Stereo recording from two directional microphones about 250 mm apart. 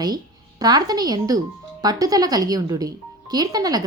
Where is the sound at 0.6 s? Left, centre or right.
Centre.